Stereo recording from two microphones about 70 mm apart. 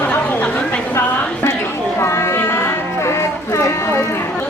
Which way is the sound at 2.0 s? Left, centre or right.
Left.